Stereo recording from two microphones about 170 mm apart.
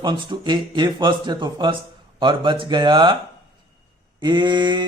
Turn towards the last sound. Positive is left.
turn(degrees=-25)  # may be behind; listen again after turning